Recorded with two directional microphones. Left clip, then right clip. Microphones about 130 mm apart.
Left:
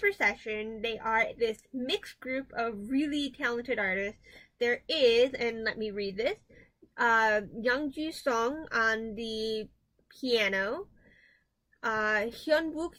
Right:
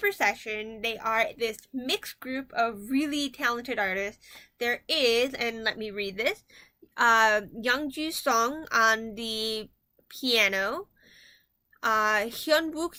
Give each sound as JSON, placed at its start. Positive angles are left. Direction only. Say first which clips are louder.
{"t": 0.0, "sound": "speech", "louder": "right 2 dB", "side_deg": -20}